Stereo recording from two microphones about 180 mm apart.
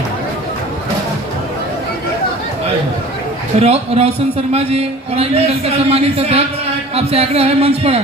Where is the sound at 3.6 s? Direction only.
35° right (ahead or behind).